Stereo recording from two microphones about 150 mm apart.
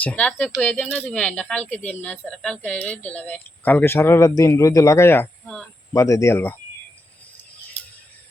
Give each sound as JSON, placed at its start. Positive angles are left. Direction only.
{"t": 0.0, "sound": "speech", "side_deg": 10}